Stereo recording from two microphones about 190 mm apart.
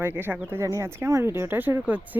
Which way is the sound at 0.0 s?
10° right (ahead or behind).